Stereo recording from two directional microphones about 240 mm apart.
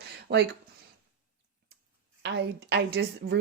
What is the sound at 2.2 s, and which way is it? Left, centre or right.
A woman's voice, right.